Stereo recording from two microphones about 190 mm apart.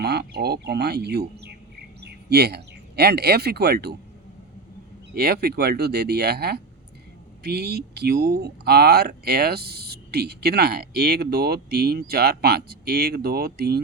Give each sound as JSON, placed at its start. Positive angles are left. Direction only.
{"t": 0.0, "sound": "duck", "side_deg": -55}
{"t": 2.0, "sound": "speech", "side_deg": -60}
{"t": 5.1, "sound": "speech", "side_deg": -55}